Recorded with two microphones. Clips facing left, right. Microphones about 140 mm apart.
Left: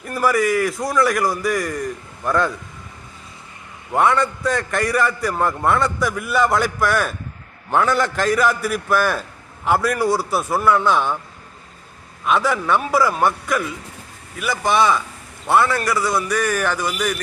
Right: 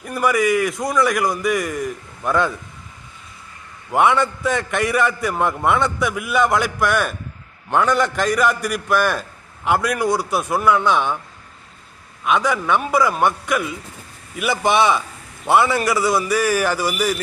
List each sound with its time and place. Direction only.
0.0 s a man's voice: centre (ahead or behind)
3.9 s a man's voice: centre (ahead or behind)
12.2 s a man's voice: centre (ahead or behind)
14.3 s a man's voice: 20° right (ahead or behind)
15.4 s a man's voice: 5° right (ahead or behind)